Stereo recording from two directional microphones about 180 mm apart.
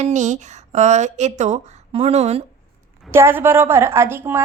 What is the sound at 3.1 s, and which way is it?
A woman's voice, 15° right (ahead or behind).